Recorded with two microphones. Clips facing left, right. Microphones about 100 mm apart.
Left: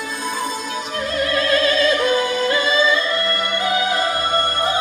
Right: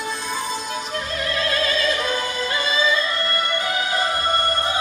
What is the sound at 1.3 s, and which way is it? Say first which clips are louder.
Opera: left 5 dB; 45° left (ahead or behind).